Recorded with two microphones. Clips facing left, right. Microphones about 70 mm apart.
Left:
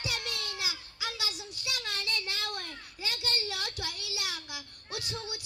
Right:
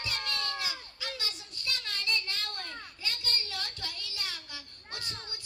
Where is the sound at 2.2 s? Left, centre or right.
Centre.